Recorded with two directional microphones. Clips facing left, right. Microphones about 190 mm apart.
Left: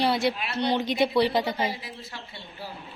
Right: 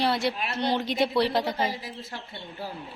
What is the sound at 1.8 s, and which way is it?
Speech, 50° right (ahead or behind).